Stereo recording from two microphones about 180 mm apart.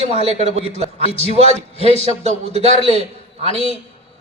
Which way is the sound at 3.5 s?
30° left (ahead or behind).